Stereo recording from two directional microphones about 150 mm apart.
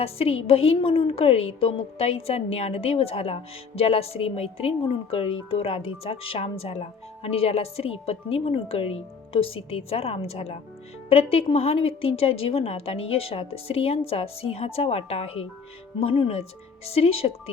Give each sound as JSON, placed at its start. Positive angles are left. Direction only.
{"t": 0.0, "sound": "a woman's voice", "side_deg": 40}